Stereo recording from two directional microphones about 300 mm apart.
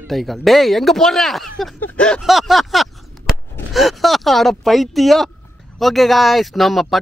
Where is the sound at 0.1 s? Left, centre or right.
Centre.